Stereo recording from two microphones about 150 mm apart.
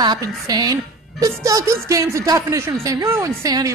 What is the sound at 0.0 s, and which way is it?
Speech, 25° right (ahead or behind).